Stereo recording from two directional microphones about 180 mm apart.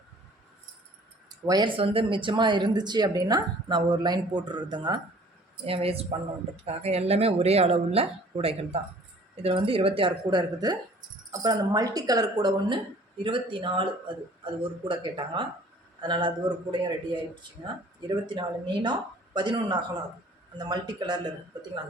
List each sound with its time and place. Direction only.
1.3 s speech: 20° right (ahead or behind)
18.3 s speech: 25° right (ahead or behind)